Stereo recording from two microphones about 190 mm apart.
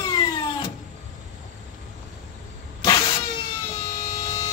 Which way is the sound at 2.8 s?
25° left (ahead or behind).